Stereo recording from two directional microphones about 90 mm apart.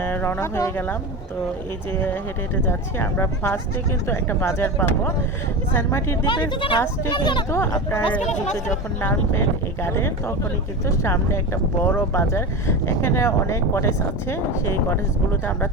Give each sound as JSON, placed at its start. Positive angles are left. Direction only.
{"t": 0.0, "sound": "speech", "side_deg": 20}
{"t": 2.6, "sound": "speech", "side_deg": 25}
{"t": 6.2, "sound": "speech", "side_deg": 65}
{"t": 7.7, "sound": "speech", "side_deg": 25}